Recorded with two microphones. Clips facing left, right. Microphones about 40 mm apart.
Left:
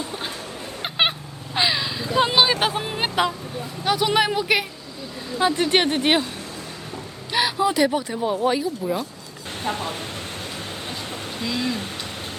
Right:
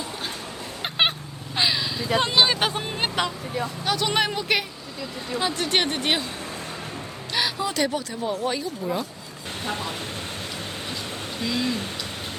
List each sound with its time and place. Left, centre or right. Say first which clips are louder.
0.8 s cat: left 1 dB; centre
1.5 s vehicle: left 2 dB; centre
2.2 s speech: left 2 dB; centre
5.4 s speech: left 5 dB; left
7.3 s speech: left 5 dB; centre
9.6 s speech: left 3 dB; left
11.6 s speech: left 1 dB; left